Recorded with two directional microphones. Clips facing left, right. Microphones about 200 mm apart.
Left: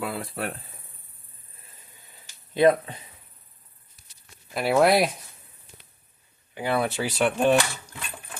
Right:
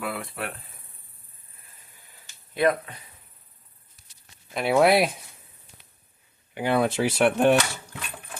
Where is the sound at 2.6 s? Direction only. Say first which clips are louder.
Left 4 dB; 25° left (ahead or behind).